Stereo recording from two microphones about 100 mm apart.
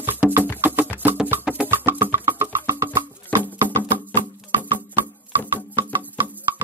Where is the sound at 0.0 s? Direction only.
20° right (ahead or behind).